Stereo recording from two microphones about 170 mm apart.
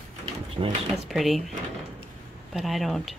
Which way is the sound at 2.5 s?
Centre (ahead or behind).